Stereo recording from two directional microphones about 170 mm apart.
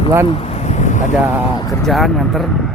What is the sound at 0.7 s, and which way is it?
Vehicle, 45° left (ahead or behind).